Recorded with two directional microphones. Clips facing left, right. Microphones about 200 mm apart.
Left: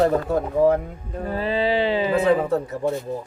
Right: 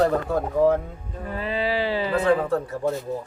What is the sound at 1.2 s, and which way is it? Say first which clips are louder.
Speech: left 4 dB; 35° left (ahead or behind).